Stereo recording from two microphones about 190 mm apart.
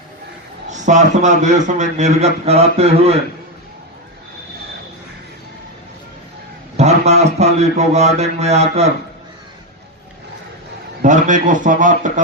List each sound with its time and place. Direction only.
0.7 s a man's voice: 40° right (ahead or behind)
6.7 s a man's voice: 35° right (ahead or behind)
11.0 s a man's voice: 40° right (ahead or behind)